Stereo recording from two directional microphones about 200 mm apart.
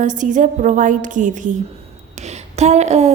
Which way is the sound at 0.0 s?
40° right (ahead or behind).